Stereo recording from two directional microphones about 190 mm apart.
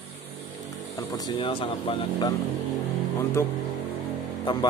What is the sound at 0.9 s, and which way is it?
Speech, 20° left (ahead or behind).